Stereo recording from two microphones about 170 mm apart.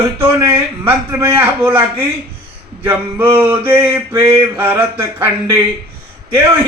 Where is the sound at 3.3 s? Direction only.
15° right (ahead or behind).